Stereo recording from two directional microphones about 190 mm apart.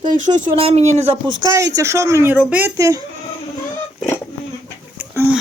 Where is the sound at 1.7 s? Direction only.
15° right (ahead or behind).